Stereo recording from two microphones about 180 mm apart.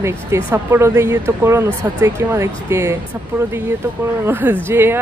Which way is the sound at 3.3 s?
5° right (ahead or behind).